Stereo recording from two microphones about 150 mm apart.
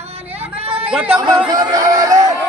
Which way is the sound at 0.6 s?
40° right (ahead or behind).